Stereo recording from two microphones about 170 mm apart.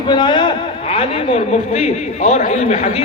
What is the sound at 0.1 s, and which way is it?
A man's voice, 25° left (ahead or behind).